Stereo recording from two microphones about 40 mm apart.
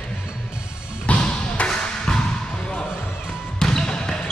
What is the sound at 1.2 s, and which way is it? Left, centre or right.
Music, left.